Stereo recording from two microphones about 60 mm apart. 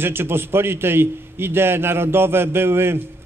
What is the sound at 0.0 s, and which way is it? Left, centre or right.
A man's voice, right.